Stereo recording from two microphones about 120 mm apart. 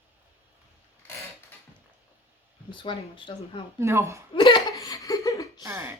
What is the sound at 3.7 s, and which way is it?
Speech, 25° right (ahead or behind).